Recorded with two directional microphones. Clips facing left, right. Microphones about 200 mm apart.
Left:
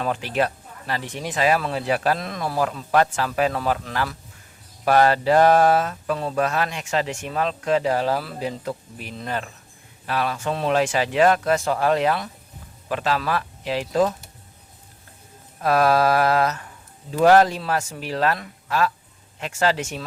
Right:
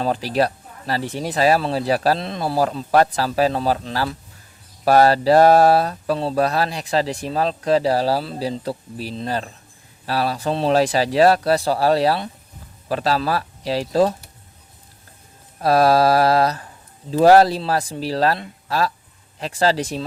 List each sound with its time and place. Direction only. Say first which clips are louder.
0.0 s speech: right 3 dB; 35° right (ahead or behind)
15.6 s speech: right 3 dB; 35° right (ahead or behind)